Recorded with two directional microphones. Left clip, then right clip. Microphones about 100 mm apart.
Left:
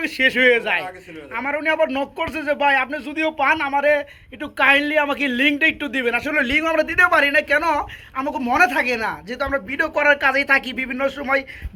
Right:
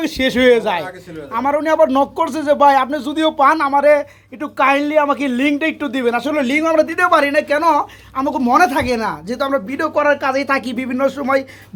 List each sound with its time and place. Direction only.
0.0 s speech: 40° right (ahead or behind)
3.2 s speech: 5° right (ahead or behind); by 9.9 s 35° right (ahead or behind)
9.9 s speech: 20° right (ahead or behind); by 11.4 s 40° right (ahead or behind)